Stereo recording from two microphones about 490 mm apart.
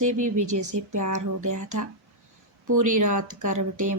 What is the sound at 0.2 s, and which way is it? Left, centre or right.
Speech, right.